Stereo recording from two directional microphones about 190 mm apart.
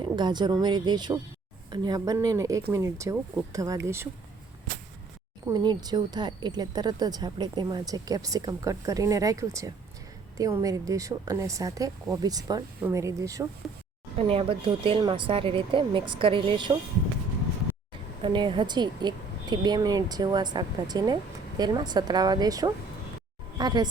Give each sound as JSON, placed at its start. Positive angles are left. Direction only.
{"t": 0.0, "sound": "a woman's voice", "side_deg": -25}
{"t": 5.5, "sound": "a woman's voice", "side_deg": -20}
{"t": 14.2, "sound": "speech", "side_deg": -30}
{"t": 18.2, "sound": "speech", "side_deg": -25}